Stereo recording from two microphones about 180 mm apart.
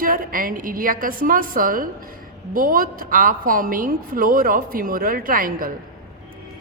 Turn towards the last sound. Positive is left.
turn(degrees=-50)  # may be behind; listen again after turning